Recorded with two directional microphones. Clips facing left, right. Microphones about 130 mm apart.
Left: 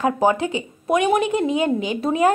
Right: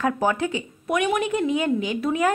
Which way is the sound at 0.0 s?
20° left (ahead or behind).